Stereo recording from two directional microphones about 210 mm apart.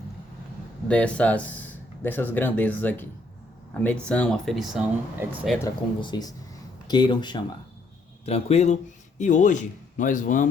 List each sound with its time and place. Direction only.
0.9 s speech: 5° left (ahead or behind)
5.6 s a man's voice: 20° left (ahead or behind); by 10.5 s 40° left (ahead or behind)